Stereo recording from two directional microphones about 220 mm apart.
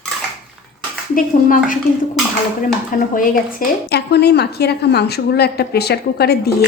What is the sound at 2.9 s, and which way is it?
A woman's voice, 40° left (ahead or behind).